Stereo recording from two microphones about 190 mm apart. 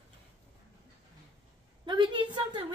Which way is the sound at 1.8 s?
25° right (ahead or behind).